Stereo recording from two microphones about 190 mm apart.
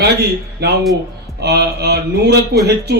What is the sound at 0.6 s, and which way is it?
A man's voice, 60° right (ahead or behind).